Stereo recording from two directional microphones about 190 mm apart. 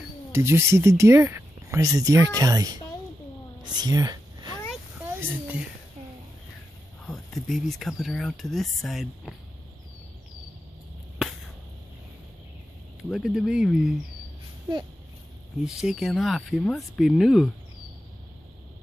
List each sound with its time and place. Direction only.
0.3 s speech: 15° right (ahead or behind)
3.7 s a sound: 20° right (ahead or behind)
5.2 s speech: 5° right (ahead or behind)
7.1 s speech: centre (ahead or behind)
11.2 s a sound: 5° right (ahead or behind)
13.1 s speech: centre (ahead or behind)
15.6 s speech: 5° right (ahead or behind)